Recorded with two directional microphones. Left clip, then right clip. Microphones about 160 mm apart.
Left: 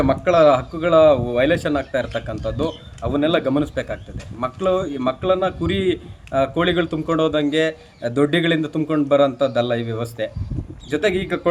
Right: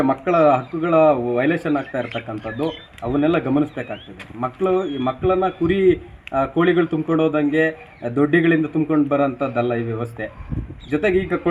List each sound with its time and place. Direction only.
0.0 s a man's voice: 25° left (ahead or behind)
7.2 s a man's voice: 15° left (ahead or behind)